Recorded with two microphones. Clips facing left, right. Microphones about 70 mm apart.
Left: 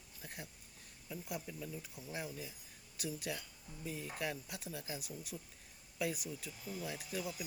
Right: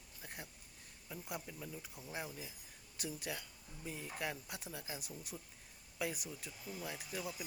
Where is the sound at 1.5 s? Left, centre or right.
Centre.